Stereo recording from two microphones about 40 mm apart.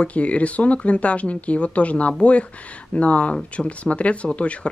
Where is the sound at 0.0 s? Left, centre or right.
Left.